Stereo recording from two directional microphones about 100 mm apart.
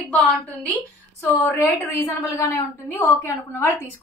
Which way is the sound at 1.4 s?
25° left (ahead or behind).